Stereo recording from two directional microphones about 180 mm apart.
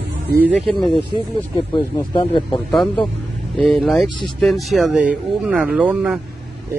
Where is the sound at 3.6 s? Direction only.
Centre (ahead or behind).